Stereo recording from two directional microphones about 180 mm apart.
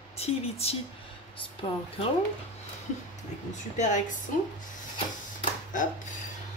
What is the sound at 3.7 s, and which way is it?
Speech, 40° left (ahead or behind).